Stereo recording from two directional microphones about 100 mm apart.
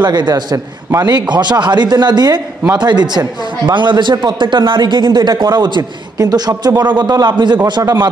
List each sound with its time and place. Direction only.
0.0 s a man's voice: 45° right (ahead or behind)